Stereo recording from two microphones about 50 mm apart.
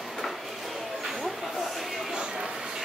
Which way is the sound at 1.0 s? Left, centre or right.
Centre.